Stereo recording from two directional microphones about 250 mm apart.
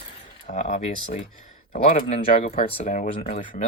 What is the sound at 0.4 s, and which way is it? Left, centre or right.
Speech, left.